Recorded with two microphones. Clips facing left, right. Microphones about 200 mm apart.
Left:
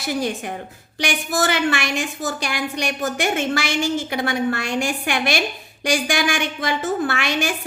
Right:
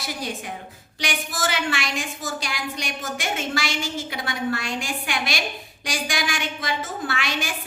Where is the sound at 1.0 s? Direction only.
65° left (ahead or behind).